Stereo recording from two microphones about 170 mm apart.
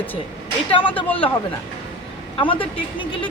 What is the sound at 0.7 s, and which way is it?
Speech, 30° left (ahead or behind).